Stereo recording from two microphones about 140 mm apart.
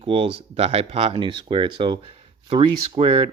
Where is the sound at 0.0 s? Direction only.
40° right (ahead or behind).